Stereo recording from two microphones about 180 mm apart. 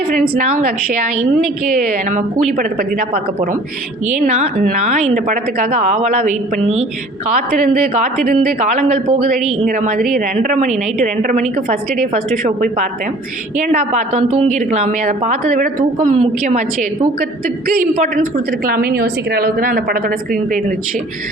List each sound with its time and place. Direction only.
0.1 s a woman's voice: 50° right (ahead or behind)
4.1 s a woman's voice: 45° right (ahead or behind)
8.2 s a woman's voice: 50° right (ahead or behind)
16.1 s a woman's voice: 35° right (ahead or behind)
18.6 s a woman's voice: 55° right (ahead or behind)